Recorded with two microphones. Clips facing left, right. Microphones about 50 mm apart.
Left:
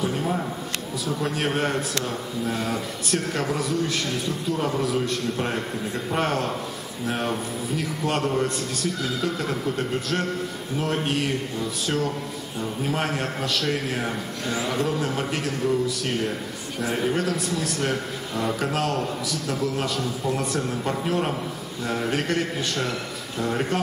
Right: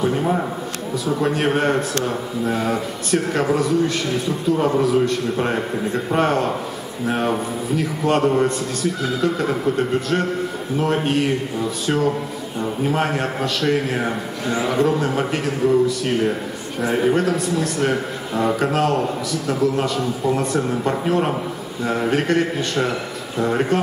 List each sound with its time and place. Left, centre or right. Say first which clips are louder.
0.0 s a man's voice: right 6 dB; centre
4.6 s a man's voice: right 7 dB; centre
6.1 s a man's voice: right 6 dB; centre